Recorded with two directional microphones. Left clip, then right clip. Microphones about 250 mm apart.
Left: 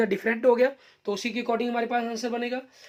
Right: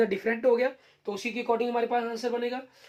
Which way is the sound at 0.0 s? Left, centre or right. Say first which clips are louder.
Left 2 dB; left.